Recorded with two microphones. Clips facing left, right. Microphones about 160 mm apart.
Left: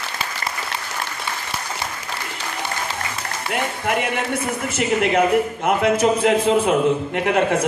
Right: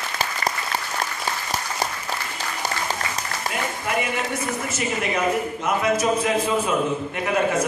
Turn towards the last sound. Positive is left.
turn(degrees=65)  # may be behind; listen again after turning